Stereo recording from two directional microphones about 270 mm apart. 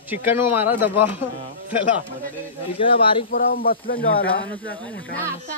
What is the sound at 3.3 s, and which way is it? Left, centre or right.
Speech, left.